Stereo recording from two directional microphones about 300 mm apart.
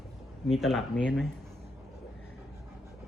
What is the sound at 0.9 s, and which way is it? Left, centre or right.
Speech, left.